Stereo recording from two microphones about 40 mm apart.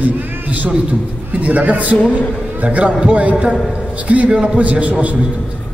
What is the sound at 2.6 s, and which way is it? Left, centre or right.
A man's voice, right.